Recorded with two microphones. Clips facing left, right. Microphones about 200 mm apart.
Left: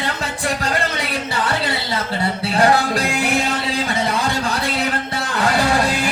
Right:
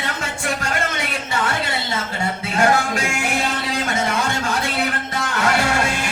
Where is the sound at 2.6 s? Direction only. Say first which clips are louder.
Left 2 dB; 35° left (ahead or behind).